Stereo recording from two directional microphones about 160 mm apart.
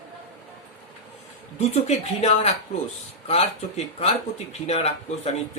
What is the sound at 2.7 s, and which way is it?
Speech, 35° left (ahead or behind).